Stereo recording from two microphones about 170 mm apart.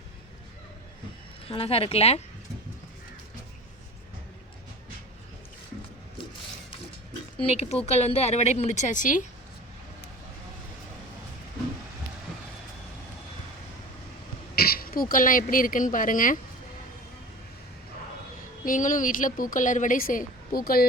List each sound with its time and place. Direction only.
1.5 s speech: 35° left (ahead or behind)
7.4 s speech: 40° left (ahead or behind)
14.5 s speech: 60° left (ahead or behind)
18.6 s a woman's voice: 50° left (ahead or behind)